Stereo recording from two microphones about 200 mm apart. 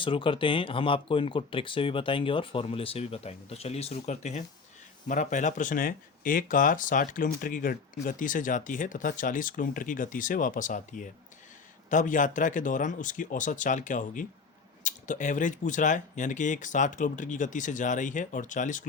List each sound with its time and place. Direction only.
0.0 s speech: 25° left (ahead or behind)